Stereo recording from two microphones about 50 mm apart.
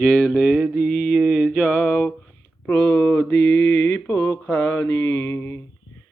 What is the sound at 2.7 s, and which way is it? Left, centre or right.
Mantra, left.